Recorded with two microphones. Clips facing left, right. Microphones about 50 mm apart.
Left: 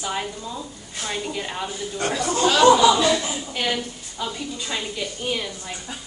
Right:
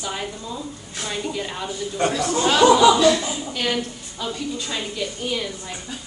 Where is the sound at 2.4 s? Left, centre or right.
Centre.